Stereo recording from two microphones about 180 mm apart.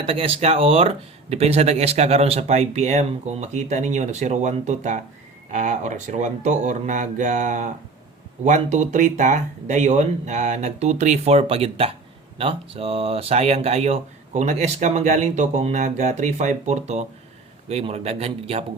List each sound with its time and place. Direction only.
0.0 s speech: 30° right (ahead or behind)